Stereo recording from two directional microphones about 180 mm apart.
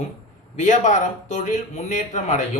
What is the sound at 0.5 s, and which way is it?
A man's voice, 45° left (ahead or behind).